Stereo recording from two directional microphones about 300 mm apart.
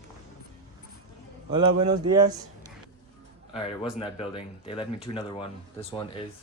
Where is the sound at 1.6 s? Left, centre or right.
Right.